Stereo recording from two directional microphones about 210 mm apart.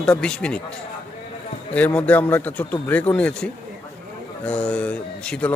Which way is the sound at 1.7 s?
5° left (ahead or behind).